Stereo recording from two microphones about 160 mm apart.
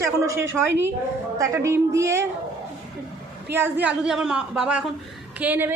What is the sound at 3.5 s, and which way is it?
A woman's voice, 10° right (ahead or behind).